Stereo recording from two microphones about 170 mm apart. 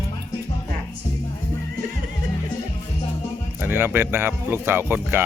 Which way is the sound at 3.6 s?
10° right (ahead or behind).